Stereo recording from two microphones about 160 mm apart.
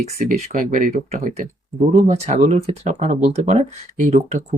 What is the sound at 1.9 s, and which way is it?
Speech, 45° right (ahead or behind).